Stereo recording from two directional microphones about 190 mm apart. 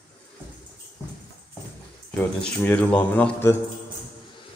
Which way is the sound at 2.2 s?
10° left (ahead or behind).